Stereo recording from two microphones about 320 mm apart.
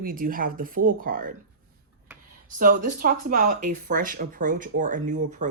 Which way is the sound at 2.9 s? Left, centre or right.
Right.